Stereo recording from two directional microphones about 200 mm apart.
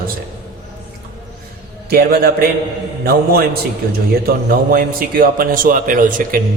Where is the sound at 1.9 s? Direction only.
50° right (ahead or behind).